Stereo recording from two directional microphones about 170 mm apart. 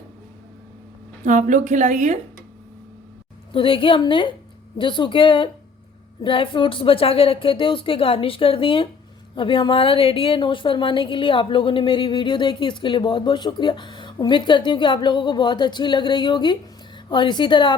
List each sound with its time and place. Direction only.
1.2 s a woman's voice: 50° right (ahead or behind)
3.5 s a woman's voice: 30° left (ahead or behind)